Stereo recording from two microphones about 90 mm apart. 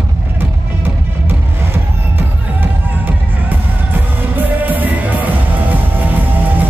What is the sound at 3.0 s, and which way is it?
Music, 20° right (ahead or behind).